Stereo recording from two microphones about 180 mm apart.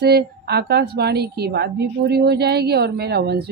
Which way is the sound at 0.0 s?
65° right (ahead or behind).